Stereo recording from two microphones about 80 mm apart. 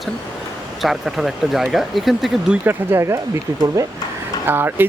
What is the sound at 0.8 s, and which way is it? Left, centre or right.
Speech, centre.